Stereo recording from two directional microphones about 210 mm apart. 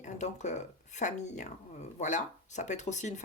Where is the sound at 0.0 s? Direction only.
35° left (ahead or behind).